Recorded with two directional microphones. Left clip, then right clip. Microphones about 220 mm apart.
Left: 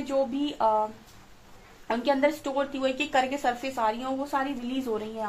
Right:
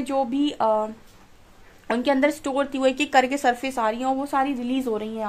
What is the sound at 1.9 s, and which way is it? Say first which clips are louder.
A woman's voice: right 3 dB; 45° right (ahead or behind).